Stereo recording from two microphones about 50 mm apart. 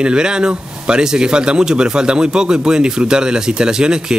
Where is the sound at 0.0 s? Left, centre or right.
Centre.